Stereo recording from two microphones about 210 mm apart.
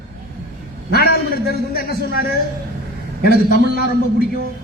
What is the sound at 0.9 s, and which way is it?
A woman's voice, 50° left (ahead or behind).